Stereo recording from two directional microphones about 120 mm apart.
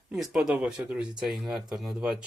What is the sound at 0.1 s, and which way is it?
Speech, 5° right (ahead or behind).